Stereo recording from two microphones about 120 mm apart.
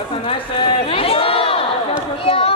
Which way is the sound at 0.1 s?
50° left (ahead or behind).